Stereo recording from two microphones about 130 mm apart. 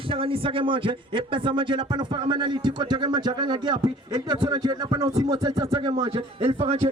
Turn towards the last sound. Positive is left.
turn(degrees=-50)  # may be behind; listen again after turning